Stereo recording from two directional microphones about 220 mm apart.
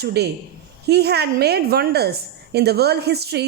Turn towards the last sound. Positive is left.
turn(degrees=-45)  # may be behind; listen again after turning